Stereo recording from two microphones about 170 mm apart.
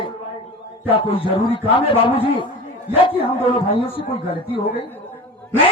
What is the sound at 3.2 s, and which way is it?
Speech, 30° left (ahead or behind).